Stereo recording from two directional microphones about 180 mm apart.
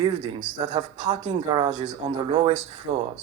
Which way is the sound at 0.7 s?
25° right (ahead or behind).